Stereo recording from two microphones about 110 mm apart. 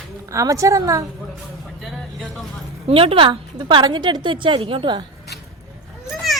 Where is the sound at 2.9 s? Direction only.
60° right (ahead or behind).